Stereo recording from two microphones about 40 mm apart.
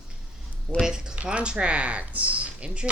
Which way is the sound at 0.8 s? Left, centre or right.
Centre.